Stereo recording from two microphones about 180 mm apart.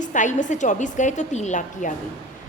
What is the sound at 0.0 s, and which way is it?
A woman's voice, 45° left (ahead or behind).